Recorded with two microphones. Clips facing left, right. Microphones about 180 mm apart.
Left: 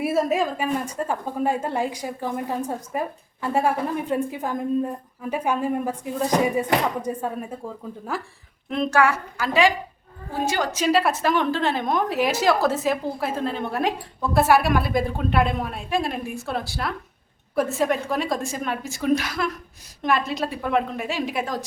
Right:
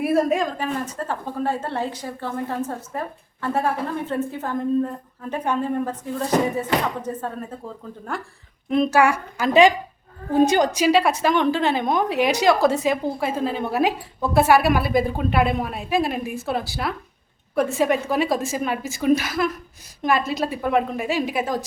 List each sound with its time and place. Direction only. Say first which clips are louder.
0.0 s a woman's voice: right 2 dB; centre (ahead or behind); by 10.8 s 15° right (ahead or behind)
10.8 s a woman's voice: left 2 dB; centre (ahead or behind)